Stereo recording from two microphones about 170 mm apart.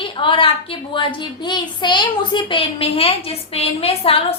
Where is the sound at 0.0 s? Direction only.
30° left (ahead or behind).